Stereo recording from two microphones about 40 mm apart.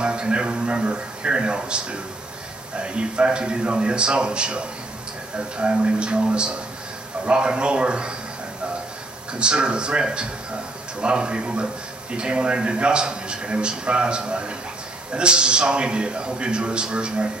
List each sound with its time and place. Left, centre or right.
0.0 s a man's voice: right
9.4 s a man's voice: right